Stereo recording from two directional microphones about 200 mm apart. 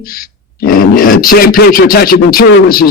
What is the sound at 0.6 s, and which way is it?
Speech, 45° left (ahead or behind).